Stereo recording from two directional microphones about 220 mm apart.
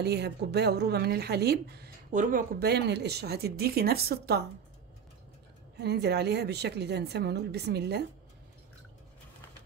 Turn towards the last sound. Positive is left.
turn(degrees=-50)  # may be behind; listen again after turning